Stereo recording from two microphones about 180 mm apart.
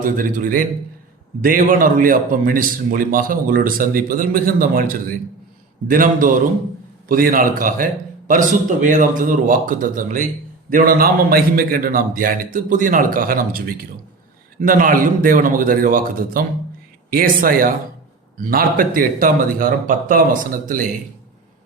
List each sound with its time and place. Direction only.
0.0 s a man's voice: 50° right (ahead or behind)